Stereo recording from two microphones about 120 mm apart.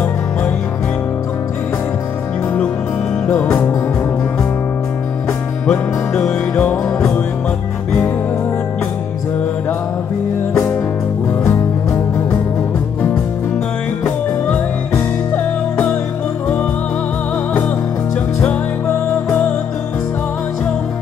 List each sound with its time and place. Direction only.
3.3 s music: 15° left (ahead or behind)
5.7 s music: 10° left (ahead or behind)
11.4 s music: 25° left (ahead or behind)
15.3 s music: 15° left (ahead or behind)
18.4 s music: 10° left (ahead or behind)